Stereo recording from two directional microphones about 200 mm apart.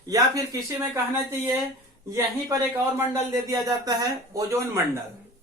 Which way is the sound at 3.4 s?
15° right (ahead or behind).